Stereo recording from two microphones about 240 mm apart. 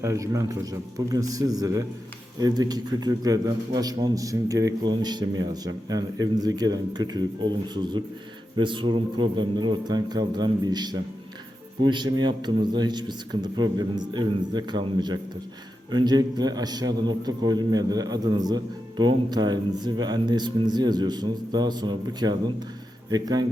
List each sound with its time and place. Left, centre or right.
0.0 s a man's voice: centre